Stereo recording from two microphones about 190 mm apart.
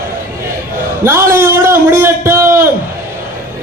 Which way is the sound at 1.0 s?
15° right (ahead or behind).